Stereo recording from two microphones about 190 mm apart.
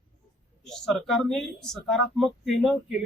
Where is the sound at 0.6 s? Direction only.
Centre (ahead or behind).